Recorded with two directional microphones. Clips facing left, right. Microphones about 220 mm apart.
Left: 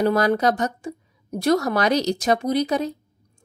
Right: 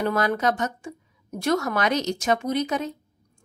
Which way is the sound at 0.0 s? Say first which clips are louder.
Left 4 dB; 35° left (ahead or behind).